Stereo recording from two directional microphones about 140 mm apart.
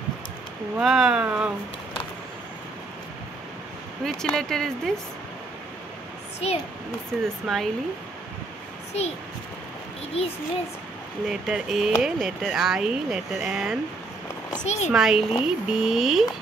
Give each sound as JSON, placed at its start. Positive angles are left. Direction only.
{"t": 0.7, "sound": "speech", "side_deg": -5}
{"t": 4.0, "sound": "speech", "side_deg": 5}
{"t": 6.4, "sound": "a child's voice", "side_deg": 50}
{"t": 7.4, "sound": "speech", "side_deg": 0}
{"t": 10.2, "sound": "a child's voice", "side_deg": 45}
{"t": 11.2, "sound": "speech", "side_deg": -5}
{"t": 14.5, "sound": "speech", "side_deg": 55}
{"t": 14.9, "sound": "speech", "side_deg": -5}